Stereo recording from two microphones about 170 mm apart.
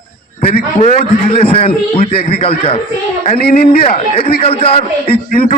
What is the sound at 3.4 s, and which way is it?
Speech, 65° left (ahead or behind).